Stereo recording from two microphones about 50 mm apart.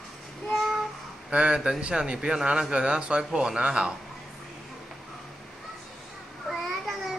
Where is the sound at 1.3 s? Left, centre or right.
Right.